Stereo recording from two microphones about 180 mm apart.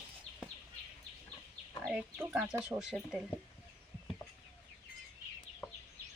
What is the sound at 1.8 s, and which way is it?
Speech, 5° right (ahead or behind).